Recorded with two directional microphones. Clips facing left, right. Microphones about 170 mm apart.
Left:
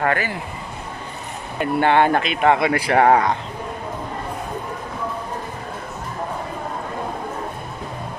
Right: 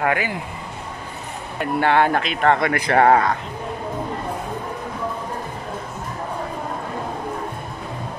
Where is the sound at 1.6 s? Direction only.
Centre (ahead or behind).